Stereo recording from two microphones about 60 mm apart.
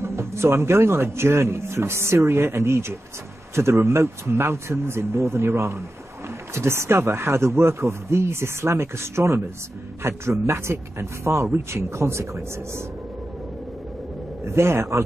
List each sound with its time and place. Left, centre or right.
0.0 s speech: right
14.4 s speech: right